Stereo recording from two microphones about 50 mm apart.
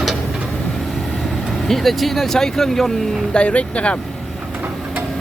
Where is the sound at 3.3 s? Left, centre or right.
Left.